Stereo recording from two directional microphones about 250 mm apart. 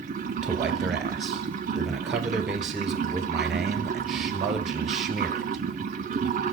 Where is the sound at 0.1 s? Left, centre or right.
Right.